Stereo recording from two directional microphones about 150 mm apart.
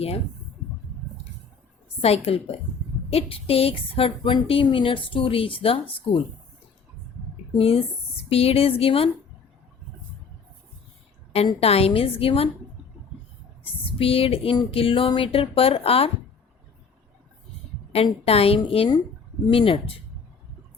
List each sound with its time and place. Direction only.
2.0 s a woman's voice: 40° left (ahead or behind)
7.5 s a woman's voice: 40° left (ahead or behind)
11.6 s a woman's voice: 40° left (ahead or behind)
14.0 s a woman's voice: 40° left (ahead or behind)
17.9 s a woman's voice: 40° left (ahead or behind)